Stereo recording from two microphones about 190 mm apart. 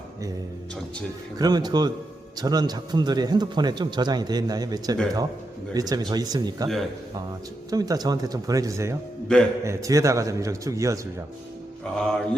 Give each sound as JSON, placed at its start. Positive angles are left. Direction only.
{"t": 1.4, "sound": "speech", "side_deg": -20}
{"t": 7.7, "sound": "a man's voice", "side_deg": -20}
{"t": 11.9, "sound": "mantra", "side_deg": 0}